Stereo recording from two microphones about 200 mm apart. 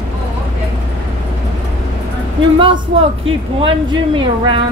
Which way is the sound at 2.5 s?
25° right (ahead or behind).